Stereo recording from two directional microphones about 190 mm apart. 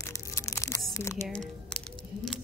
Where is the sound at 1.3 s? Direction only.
5° left (ahead or behind).